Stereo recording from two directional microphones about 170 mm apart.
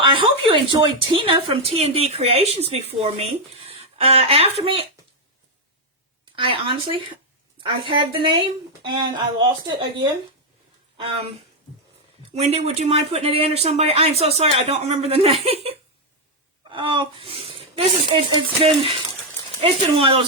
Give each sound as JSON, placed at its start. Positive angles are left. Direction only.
{"t": 0.0, "sound": "a woman's voice", "side_deg": -30}
{"t": 6.3, "sound": "a woman's voice", "side_deg": -30}
{"t": 12.3, "sound": "a woman's voice", "side_deg": -40}
{"t": 16.7, "sound": "a woman's voice", "side_deg": -30}